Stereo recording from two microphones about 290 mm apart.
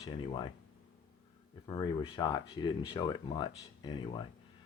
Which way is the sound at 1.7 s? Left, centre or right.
Centre.